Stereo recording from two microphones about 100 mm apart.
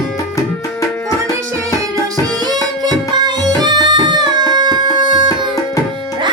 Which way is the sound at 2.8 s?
45° right (ahead or behind).